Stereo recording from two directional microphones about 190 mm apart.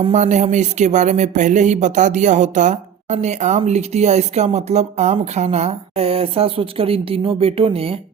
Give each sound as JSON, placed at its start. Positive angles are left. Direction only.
{"t": 0.0, "sound": "speech", "side_deg": -35}